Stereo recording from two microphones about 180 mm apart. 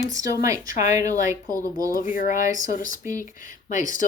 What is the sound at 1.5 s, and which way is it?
Speech, 50° left (ahead or behind).